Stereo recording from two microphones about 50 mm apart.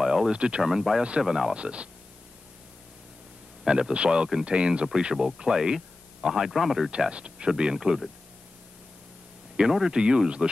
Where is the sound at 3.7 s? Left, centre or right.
Centre.